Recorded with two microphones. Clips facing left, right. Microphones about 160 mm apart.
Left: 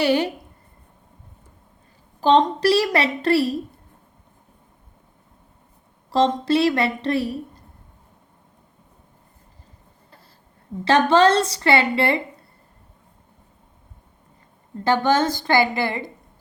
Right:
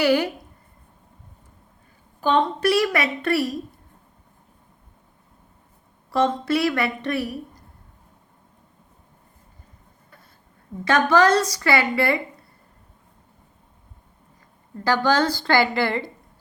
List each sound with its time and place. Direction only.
0.0 s a woman's voice: 25° left (ahead or behind)
2.2 s a woman's voice: 35° left (ahead or behind)
6.1 s a woman's voice: 30° left (ahead or behind)
10.8 s a woman's voice: 30° left (ahead or behind)
14.8 s a woman's voice: 25° left (ahead or behind)